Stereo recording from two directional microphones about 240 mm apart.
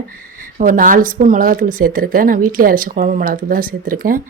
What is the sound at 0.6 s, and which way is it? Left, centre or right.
Speech, right.